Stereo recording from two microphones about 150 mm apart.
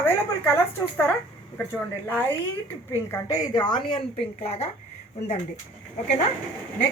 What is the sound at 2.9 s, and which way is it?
A woman's voice, 20° left (ahead or behind).